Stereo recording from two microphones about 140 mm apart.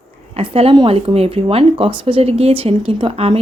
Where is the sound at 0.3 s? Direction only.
45° right (ahead or behind).